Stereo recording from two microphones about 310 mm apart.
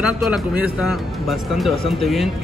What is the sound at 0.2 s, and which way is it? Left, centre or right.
Speech, centre.